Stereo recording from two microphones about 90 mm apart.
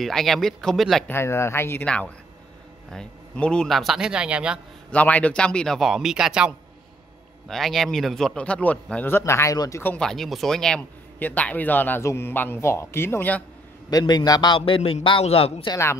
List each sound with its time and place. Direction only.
0.0 s speech: 5° left (ahead or behind)
1.0 s a man's voice: 30° left (ahead or behind)
1.9 s speech: 15° left (ahead or behind); by 4.6 s 10° right (ahead or behind)
4.9 s speech: 15° left (ahead or behind)
5.8 s speech: 5° right (ahead or behind)
7.4 s speech: 5° left (ahead or behind)
9.0 s speech: 30° left (ahead or behind)
9.9 s speech: 5° left (ahead or behind)
11.1 s a man's voice: 15° left (ahead or behind)
12.0 s a man's voice: 30° left (ahead or behind)
13.8 s a man's voice: 50° left (ahead or behind)
14.6 s a man's voice: 85° left